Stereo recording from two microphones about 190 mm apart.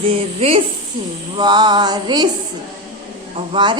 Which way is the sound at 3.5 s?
25° right (ahead or behind).